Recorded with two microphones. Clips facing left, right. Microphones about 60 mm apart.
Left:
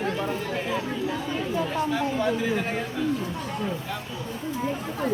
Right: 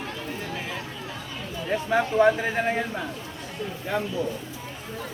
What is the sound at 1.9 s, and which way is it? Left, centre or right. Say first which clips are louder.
Speech: right 5 dB; right.